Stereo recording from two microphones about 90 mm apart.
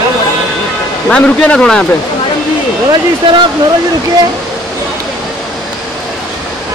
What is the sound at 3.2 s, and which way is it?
Speech, 65° right (ahead or behind).